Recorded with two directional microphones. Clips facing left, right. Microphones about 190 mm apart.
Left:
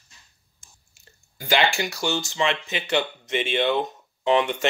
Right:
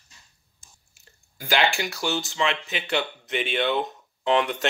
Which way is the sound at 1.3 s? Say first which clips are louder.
Left 1 dB; centre (ahead or behind).